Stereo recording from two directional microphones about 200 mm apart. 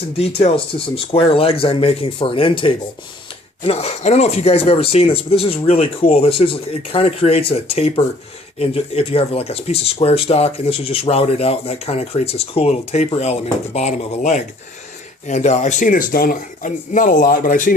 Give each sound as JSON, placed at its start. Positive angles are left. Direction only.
{"t": 0.2, "sound": "speech", "side_deg": 30}